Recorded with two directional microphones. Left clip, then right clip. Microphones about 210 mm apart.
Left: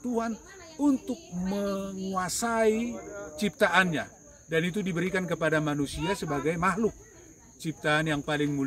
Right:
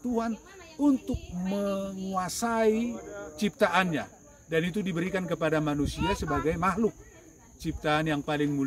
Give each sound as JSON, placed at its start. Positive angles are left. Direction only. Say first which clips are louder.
{"t": 0.7, "sound": "a man's voice", "louder": "right 1 dB", "side_deg": 5}
{"t": 2.9, "sound": "speech", "louder": "even", "side_deg": 55}
{"t": 3.3, "sound": "a man's voice", "louder": "left 1 dB", "side_deg": 5}